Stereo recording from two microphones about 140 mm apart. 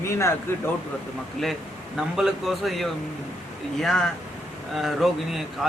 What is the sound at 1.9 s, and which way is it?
Speech, 5° right (ahead or behind).